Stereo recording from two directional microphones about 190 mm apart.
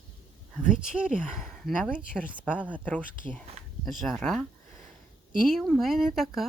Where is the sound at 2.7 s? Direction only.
10° left (ahead or behind).